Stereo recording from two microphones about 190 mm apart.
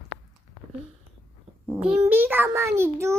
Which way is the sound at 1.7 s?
10° right (ahead or behind).